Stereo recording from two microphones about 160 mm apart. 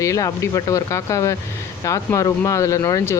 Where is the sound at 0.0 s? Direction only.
20° left (ahead or behind).